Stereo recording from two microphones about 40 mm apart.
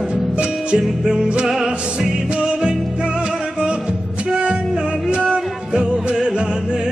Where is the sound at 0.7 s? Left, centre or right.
Right.